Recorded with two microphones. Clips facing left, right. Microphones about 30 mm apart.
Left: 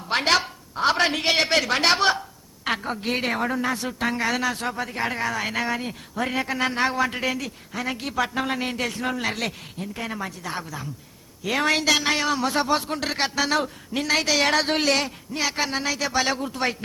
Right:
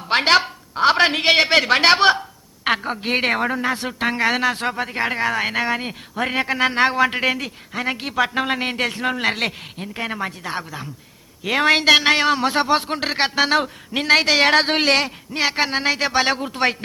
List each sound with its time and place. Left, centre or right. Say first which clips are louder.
0.1 s speech: right 5 dB; right
14.3 s speech: right 5 dB; right